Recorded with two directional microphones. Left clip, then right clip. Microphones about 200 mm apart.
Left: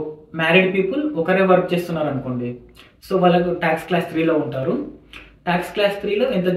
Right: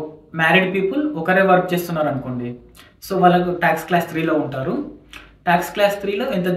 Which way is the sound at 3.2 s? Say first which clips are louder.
Right 2 dB; 15° right (ahead or behind).